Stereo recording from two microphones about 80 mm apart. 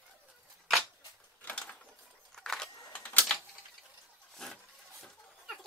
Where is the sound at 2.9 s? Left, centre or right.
Centre.